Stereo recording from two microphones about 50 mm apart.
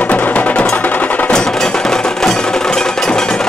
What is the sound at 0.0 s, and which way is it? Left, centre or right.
Music, left.